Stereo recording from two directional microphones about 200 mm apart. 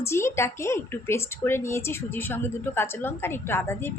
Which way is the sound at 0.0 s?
15° left (ahead or behind).